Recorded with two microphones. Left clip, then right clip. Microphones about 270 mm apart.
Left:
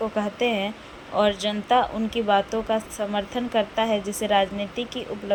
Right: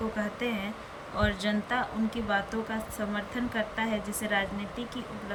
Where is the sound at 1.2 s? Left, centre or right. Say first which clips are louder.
Left 8 dB; centre.